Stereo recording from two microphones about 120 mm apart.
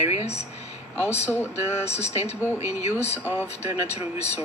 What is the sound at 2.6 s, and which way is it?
Mantra, 65° left (ahead or behind).